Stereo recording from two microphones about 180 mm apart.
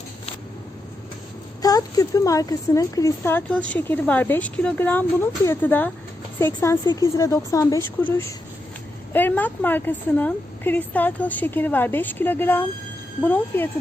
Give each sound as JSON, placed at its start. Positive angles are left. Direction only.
{"t": 1.6, "sound": "speech", "side_deg": 20}